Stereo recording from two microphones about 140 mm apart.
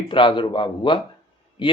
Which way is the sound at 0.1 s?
35° left (ahead or behind).